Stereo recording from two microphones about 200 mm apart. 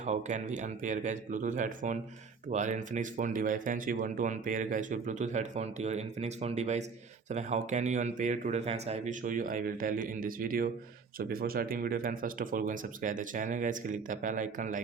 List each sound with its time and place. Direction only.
0.0 s speech: 35° right (ahead or behind)